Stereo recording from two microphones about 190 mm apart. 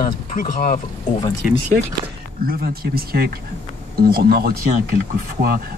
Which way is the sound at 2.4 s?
50° right (ahead or behind).